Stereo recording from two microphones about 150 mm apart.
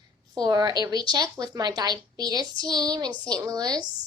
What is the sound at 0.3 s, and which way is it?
A woman's voice, 25° right (ahead or behind).